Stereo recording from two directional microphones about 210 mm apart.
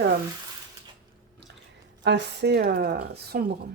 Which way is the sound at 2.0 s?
55° right (ahead or behind).